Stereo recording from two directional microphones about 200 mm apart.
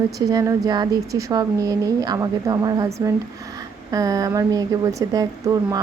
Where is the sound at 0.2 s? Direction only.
20° right (ahead or behind).